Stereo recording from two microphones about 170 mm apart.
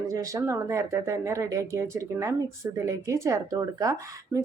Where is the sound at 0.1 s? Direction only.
20° right (ahead or behind).